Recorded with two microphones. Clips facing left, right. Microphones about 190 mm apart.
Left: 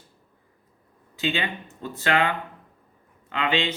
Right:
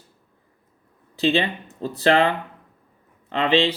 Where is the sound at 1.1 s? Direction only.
35° right (ahead or behind).